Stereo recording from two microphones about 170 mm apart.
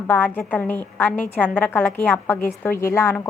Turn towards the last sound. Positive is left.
turn(degrees=15)  # may be behind; listen again after turning